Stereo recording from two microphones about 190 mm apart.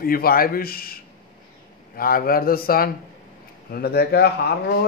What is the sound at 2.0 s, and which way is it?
A man's voice, 50° left (ahead or behind).